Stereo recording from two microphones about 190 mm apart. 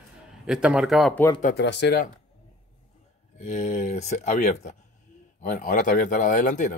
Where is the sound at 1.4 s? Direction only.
60° left (ahead or behind).